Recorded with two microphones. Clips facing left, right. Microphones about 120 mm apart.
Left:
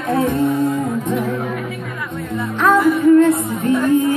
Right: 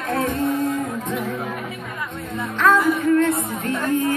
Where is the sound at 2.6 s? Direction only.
15° left (ahead or behind).